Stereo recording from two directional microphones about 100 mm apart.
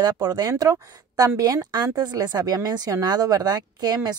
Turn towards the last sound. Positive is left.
turn(degrees=-40)  # may be behind; listen again after turning